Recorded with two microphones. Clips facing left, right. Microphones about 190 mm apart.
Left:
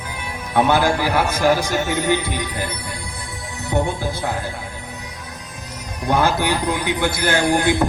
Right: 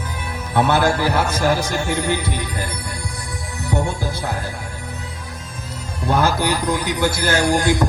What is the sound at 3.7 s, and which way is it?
Speech, 20° left (ahead or behind).